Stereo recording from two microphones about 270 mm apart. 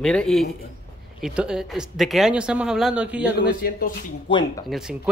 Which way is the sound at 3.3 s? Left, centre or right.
Left.